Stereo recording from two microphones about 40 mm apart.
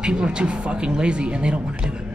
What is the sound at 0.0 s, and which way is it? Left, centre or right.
A man's voice, right.